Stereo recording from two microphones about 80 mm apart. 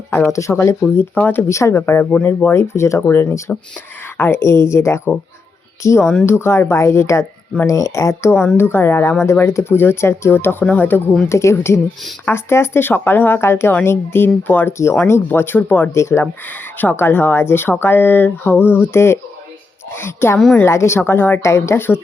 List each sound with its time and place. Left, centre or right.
0.3 s speech: left
1.5 s speech: left
2.0 s speech: left
11.3 s speech: left
16.0 s speech: left
16.7 s speech: left